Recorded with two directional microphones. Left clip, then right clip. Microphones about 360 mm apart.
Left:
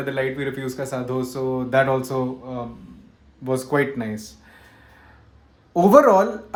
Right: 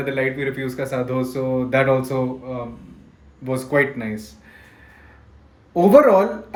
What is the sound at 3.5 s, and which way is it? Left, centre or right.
Speech, centre.